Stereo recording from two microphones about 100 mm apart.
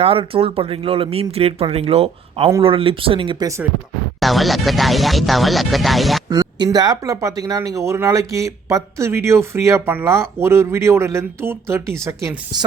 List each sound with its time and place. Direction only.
0.0 s speech: 75° right (ahead or behind)
2.6 s speech: 65° right (ahead or behind)
4.2 s speech: centre (ahead or behind)
6.2 s speech: 45° right (ahead or behind)